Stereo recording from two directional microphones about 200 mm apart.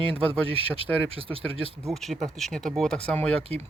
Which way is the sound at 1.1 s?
25° right (ahead or behind).